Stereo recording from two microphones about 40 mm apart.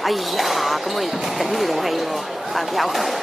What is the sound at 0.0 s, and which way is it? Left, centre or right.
Basketball bounce, centre.